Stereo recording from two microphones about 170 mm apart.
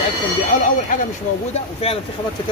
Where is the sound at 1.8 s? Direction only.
35° left (ahead or behind).